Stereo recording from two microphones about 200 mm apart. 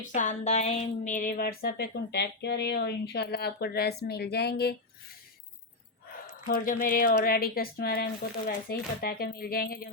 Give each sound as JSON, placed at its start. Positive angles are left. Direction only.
{"t": 0.0, "sound": "a woman's voice", "side_deg": 40}
{"t": 6.1, "sound": "a woman's voice", "side_deg": 45}